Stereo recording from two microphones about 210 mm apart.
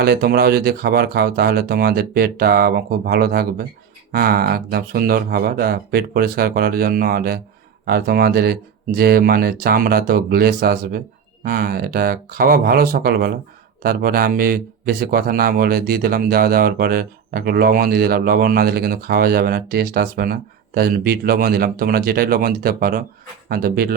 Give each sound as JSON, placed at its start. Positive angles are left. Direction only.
{"t": 0.0, "sound": "speech", "side_deg": -50}